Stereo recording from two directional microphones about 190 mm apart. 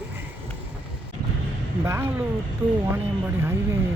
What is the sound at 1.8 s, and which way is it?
Speech, 15° right (ahead or behind).